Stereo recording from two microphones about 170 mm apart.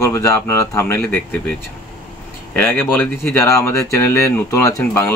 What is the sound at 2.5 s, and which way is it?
Speech, 10° left (ahead or behind).